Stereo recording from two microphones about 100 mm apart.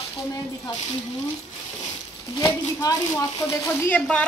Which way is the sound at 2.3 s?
40° left (ahead or behind).